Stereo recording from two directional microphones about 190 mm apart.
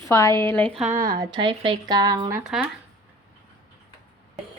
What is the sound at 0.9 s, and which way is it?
Speech, 50° right (ahead or behind).